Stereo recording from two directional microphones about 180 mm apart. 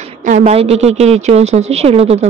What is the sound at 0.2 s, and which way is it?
Speech, 45° right (ahead or behind).